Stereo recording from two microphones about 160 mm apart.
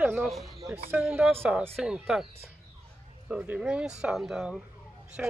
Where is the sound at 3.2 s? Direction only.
5° right (ahead or behind).